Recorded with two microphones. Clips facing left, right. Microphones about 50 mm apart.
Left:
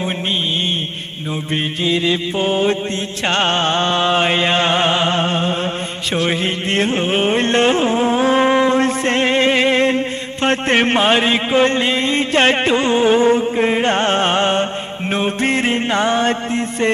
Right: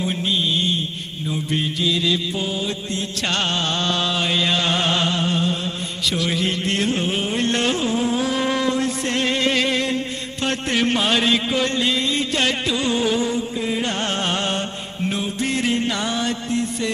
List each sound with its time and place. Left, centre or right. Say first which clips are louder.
1.8 s a man's voice: left 5 dB; left
3.2 s a man's voice: left 7 dB; left
6.1 s carnatic music: left 5 dB; left
10.4 s a man's voice: left 6 dB; left